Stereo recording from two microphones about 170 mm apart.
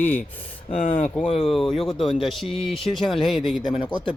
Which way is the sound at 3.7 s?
30° left (ahead or behind).